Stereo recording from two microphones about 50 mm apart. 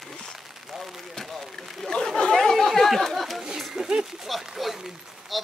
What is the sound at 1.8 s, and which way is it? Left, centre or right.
Chatter, centre.